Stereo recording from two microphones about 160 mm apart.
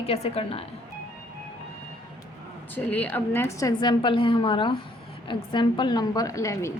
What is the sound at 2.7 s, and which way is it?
A woman's voice, 10° left (ahead or behind).